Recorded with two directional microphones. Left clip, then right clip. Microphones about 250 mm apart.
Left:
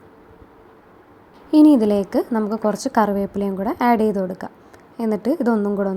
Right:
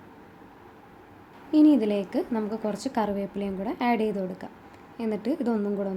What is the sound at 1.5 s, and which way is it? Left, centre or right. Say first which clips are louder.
A woman's voice: left 7 dB; left.